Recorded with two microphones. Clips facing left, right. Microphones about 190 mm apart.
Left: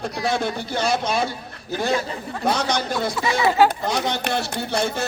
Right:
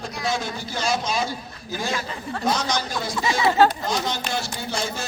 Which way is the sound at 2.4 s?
60° left (ahead or behind).